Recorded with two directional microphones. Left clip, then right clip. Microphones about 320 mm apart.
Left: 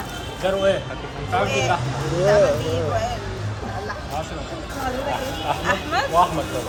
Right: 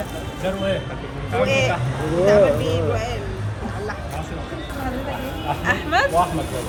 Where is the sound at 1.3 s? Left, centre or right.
Left.